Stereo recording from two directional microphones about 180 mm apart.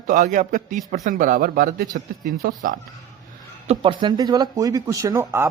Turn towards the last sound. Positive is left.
turn(degrees=-15)  # may be behind; listen again after turning